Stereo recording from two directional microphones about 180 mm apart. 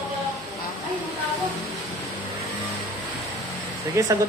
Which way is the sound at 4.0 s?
15° right (ahead or behind).